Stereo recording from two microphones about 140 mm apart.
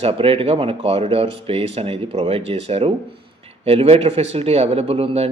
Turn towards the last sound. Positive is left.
turn(degrees=-45)  # may be behind; listen again after turning